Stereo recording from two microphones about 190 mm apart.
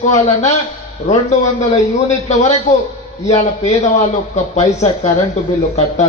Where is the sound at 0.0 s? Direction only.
35° left (ahead or behind).